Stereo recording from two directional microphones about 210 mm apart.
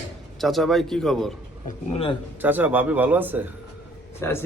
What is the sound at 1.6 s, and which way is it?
Speech, 30° left (ahead or behind).